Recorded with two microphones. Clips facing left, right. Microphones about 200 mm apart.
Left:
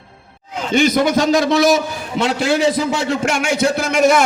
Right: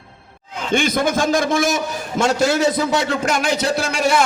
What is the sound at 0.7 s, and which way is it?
A man's voice, 50° right (ahead or behind).